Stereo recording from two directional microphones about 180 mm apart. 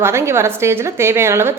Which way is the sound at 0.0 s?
15° right (ahead or behind).